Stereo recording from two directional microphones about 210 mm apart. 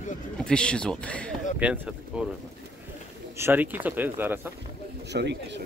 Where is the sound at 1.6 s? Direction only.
5° right (ahead or behind).